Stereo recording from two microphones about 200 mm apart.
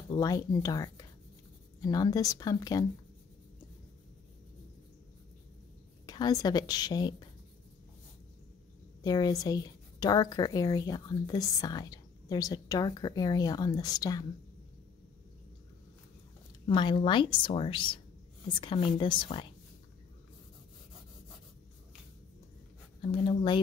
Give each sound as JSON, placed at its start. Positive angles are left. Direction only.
{"t": 0.1, "sound": "a woman's voice", "side_deg": 20}
{"t": 6.0, "sound": "a woman's voice", "side_deg": 20}
{"t": 9.0, "sound": "a woman's voice", "side_deg": 20}
{"t": 16.6, "sound": "a woman's voice", "side_deg": 25}
{"t": 23.2, "sound": "a woman's voice", "side_deg": 25}